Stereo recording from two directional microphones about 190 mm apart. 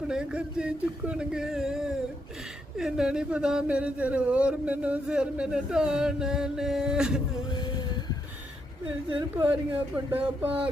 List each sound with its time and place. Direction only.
0.1 s speech: 5° right (ahead or behind)
7.5 s vehicle: 20° left (ahead or behind)
9.0 s speech: 25° right (ahead or behind)
9.5 s speech: 10° right (ahead or behind)